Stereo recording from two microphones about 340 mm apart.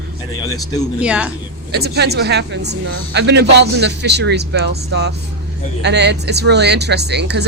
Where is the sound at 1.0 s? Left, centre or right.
Centre.